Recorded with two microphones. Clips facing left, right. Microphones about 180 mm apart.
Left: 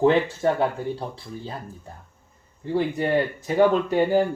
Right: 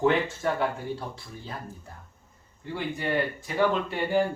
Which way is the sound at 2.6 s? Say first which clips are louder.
Left 7 dB; 35° left (ahead or behind).